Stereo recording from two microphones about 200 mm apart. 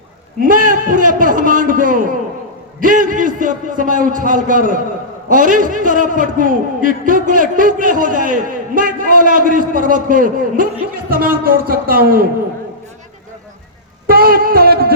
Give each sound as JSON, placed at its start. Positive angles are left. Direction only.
{"t": 0.4, "sound": "a man's voice", "side_deg": -45}
{"t": 14.1, "sound": "a man's voice", "side_deg": -45}